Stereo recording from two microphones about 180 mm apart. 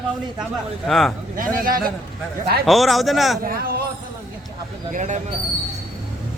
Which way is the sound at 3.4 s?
55° right (ahead or behind).